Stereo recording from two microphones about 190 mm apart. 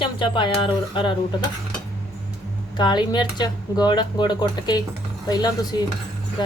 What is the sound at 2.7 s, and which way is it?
Speech, 25° left (ahead or behind).